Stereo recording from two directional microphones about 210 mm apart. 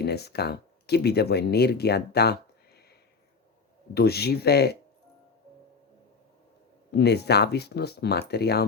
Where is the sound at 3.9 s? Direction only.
50° left (ahead or behind).